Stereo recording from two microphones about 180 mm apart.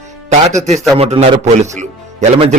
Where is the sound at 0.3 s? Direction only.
40° right (ahead or behind).